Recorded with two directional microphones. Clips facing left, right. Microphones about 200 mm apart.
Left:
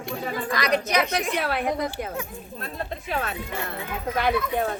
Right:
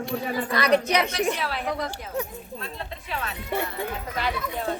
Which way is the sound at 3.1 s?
50° left (ahead or behind).